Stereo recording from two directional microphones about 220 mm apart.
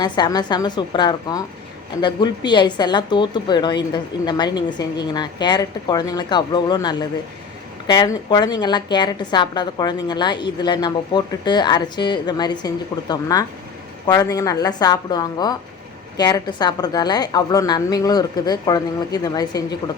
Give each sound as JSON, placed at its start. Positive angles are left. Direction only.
{"t": 0.0, "sound": "a woman's voice", "side_deg": 20}